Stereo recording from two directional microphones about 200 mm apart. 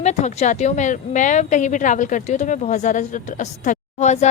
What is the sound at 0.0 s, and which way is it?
Speech, 35° left (ahead or behind).